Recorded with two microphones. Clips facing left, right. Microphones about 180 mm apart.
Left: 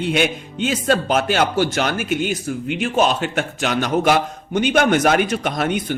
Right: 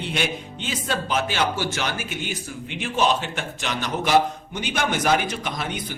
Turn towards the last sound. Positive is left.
turn(degrees=60)  # may be behind; listen again after turning